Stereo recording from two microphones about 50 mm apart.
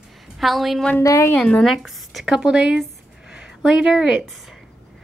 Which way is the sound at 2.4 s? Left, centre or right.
Centre.